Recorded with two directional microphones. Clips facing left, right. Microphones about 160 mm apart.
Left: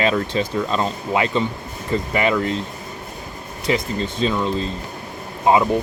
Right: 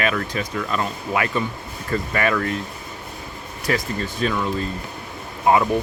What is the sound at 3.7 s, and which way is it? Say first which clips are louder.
Speech: left 2 dB; 20° left (ahead or behind).